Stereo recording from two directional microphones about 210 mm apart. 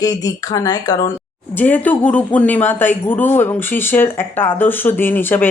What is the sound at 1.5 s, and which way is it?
Speech, 10° left (ahead or behind).